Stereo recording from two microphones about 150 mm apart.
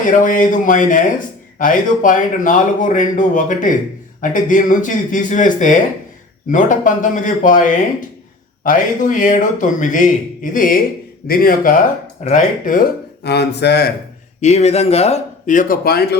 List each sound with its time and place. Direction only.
0.0 s speech: 60° left (ahead or behind)
11.3 s speech: 75° left (ahead or behind)
13.2 s speech: 90° left
14.4 s speech: 45° left (ahead or behind); by 16.0 s 75° left (ahead or behind)